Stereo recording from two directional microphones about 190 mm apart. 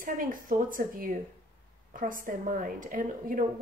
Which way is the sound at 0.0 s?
45° right (ahead or behind).